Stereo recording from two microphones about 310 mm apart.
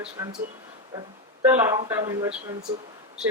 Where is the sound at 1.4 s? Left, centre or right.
Centre.